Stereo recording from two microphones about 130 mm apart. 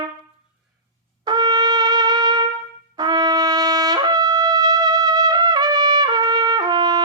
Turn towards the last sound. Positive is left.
turn(degrees=-35)  # may be behind; listen again after turning